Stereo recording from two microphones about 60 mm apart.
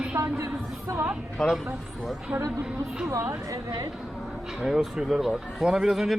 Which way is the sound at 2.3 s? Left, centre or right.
Centre.